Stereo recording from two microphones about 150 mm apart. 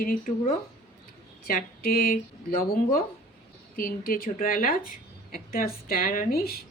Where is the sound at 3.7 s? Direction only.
75° left (ahead or behind).